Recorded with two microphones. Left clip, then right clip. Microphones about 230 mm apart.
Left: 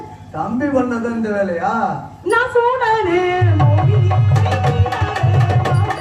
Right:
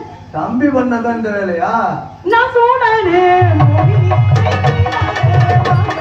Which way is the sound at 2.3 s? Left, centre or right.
Left.